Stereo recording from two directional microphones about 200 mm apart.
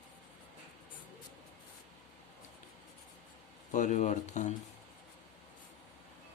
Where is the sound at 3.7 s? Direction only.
35° left (ahead or behind).